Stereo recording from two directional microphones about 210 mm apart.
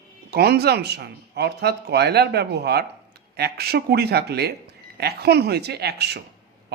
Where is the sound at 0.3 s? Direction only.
50° right (ahead or behind).